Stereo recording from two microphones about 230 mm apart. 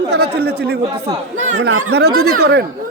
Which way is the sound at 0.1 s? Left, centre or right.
Right.